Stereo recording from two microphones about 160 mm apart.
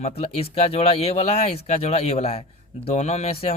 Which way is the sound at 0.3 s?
40° left (ahead or behind).